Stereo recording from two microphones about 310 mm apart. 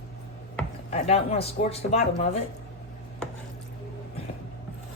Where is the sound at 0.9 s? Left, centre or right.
Centre.